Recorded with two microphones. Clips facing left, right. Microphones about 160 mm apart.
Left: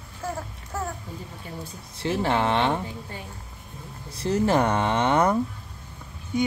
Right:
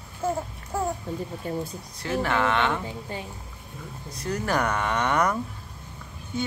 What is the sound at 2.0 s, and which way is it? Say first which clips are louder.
Speech: left 1 dB; 30° left (ahead or behind).